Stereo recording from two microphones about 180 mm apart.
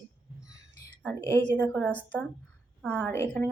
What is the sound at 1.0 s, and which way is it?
A woman's voice, 10° left (ahead or behind).